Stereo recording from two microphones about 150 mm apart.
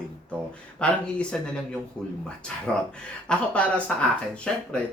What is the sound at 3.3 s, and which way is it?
Speech, 10° left (ahead or behind).